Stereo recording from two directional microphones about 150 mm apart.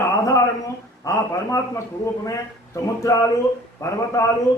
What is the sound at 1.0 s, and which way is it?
A man's voice, 20° left (ahead or behind).